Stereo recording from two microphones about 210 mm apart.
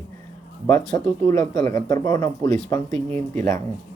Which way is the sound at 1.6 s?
35° right (ahead or behind).